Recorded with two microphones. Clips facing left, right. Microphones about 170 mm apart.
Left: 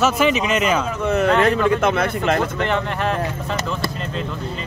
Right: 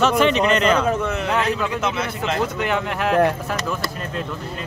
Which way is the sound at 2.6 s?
5° right (ahead or behind).